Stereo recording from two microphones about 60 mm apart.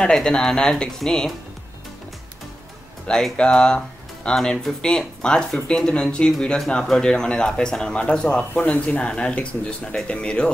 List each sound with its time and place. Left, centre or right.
0.0 s a man's voice: centre
3.1 s speech: centre
4.4 s speech: centre
4.8 s a man's voice: centre
8.5 s speech: left